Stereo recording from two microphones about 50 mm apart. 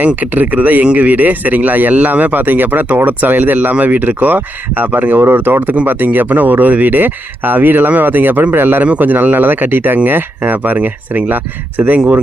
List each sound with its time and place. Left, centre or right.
0.2 s a man's voice: right